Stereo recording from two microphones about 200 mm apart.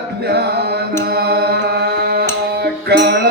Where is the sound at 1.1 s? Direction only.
55° right (ahead or behind).